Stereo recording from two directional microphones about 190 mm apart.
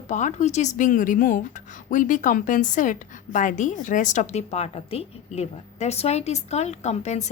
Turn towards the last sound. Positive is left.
turn(degrees=35)  # may be behind; listen again after turning